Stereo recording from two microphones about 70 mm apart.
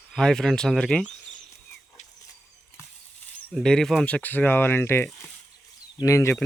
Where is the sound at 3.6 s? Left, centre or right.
Centre.